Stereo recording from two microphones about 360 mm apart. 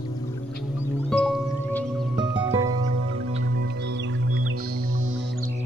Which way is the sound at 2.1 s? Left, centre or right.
Centre.